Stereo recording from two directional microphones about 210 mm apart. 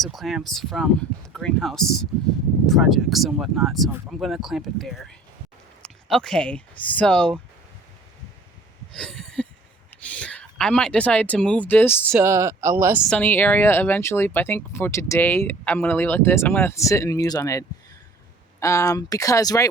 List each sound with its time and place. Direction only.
0.0 s speech: centre (ahead or behind)
8.9 s a sound: centre (ahead or behind)
9.9 s speech: 5° left (ahead or behind)
12.1 s speech: 15° right (ahead or behind)
13.1 s speech: 10° left (ahead or behind)